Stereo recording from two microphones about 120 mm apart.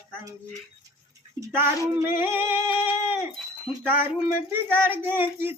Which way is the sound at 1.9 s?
20° right (ahead or behind).